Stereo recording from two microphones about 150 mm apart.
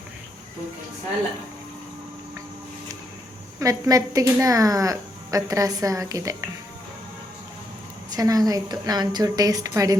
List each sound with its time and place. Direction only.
3.6 s a woman's voice: 20° right (ahead or behind)
8.1 s a woman's voice: 25° right (ahead or behind)